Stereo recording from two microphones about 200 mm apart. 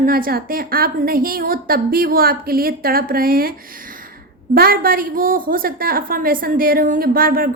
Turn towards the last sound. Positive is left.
turn(degrees=-45)  # may be behind; listen again after turning